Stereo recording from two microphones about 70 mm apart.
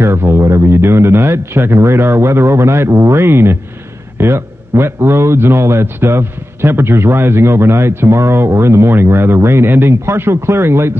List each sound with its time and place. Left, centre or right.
0.0 s a man's voice: right